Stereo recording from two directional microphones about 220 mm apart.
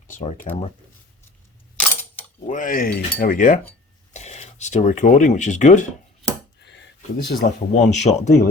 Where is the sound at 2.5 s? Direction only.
35° left (ahead or behind).